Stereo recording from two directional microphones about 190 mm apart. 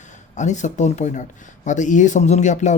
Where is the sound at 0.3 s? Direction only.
40° left (ahead or behind).